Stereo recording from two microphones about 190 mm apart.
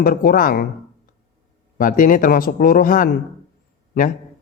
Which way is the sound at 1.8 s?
45° left (ahead or behind).